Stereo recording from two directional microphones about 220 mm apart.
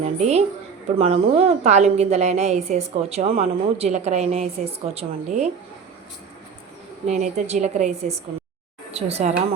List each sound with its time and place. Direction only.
0.0 s a woman's voice: 30° right (ahead or behind)
7.1 s a woman's voice: 30° right (ahead or behind)